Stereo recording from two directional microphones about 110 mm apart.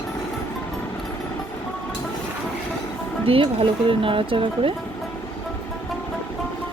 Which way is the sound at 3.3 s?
55° right (ahead or behind).